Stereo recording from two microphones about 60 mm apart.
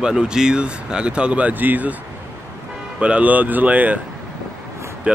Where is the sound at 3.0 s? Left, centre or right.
Right.